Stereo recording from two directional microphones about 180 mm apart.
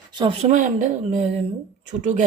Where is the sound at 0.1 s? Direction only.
25° right (ahead or behind).